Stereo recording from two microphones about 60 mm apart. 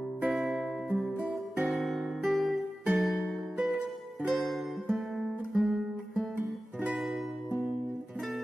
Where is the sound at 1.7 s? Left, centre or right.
Centre.